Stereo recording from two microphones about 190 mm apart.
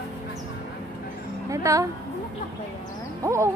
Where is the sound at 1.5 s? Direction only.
15° right (ahead or behind).